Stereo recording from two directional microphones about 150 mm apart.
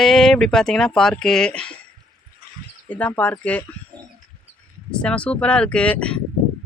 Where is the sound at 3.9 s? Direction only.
30° right (ahead or behind).